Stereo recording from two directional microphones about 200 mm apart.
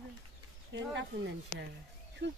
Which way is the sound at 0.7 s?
60° right (ahead or behind).